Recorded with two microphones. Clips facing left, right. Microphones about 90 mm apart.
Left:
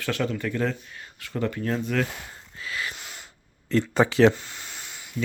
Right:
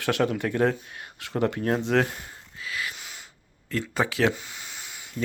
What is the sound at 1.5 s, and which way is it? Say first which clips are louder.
Speech: right 2 dB; 55° right (ahead or behind).